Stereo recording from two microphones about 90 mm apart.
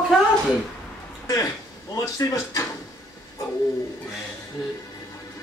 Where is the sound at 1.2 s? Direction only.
40° left (ahead or behind).